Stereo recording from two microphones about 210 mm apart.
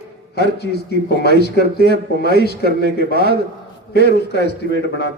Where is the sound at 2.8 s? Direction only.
50° left (ahead or behind).